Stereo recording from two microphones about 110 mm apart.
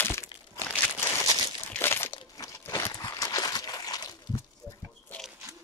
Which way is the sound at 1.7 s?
20° left (ahead or behind).